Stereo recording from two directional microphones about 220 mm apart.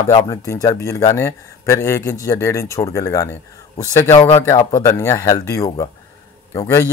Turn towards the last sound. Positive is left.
turn(degrees=15)  # may be behind; listen again after turning